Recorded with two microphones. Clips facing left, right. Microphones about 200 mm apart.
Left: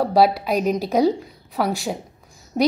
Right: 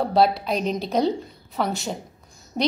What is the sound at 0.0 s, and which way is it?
A woman's voice, centre (ahead or behind).